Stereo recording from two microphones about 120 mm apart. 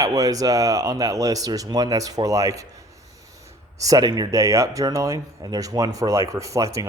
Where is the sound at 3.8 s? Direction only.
30° right (ahead or behind).